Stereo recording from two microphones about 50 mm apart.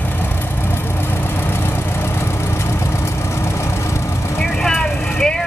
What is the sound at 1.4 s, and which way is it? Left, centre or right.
Vehicle, left.